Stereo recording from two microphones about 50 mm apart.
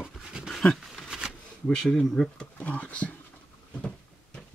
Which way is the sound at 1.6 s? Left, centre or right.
Centre.